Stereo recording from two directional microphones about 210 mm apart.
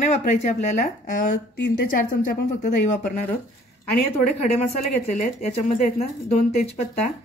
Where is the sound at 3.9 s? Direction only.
45° left (ahead or behind).